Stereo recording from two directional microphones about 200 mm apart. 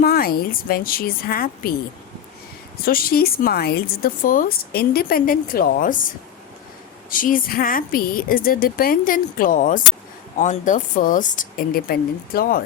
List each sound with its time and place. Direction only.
0.0 s a woman's voice: 50° left (ahead or behind)
2.8 s a woman's voice: 50° left (ahead or behind)
7.1 s a woman's voice: 45° left (ahead or behind)